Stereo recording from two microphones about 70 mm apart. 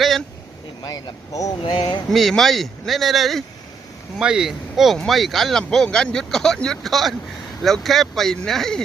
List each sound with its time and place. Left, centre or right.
0.8 s speech: left
1.3 s speech: left
1.7 s speech: left
2.0 s speech: centre